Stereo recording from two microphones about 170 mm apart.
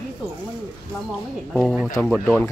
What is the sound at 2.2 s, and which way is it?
Speech, 10° left (ahead or behind).